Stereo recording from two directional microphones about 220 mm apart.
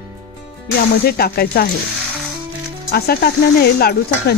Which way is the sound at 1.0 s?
45° left (ahead or behind).